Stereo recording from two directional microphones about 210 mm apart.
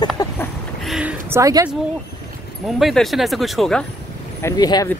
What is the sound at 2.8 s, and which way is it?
Speech, centre (ahead or behind).